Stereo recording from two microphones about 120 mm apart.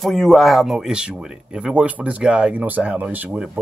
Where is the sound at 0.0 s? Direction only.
Centre (ahead or behind).